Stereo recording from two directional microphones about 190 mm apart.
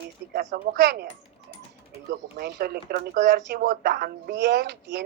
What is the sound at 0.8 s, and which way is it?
Speech, 55° right (ahead or behind).